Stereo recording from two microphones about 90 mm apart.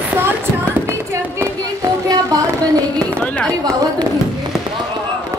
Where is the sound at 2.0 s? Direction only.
45° right (ahead or behind).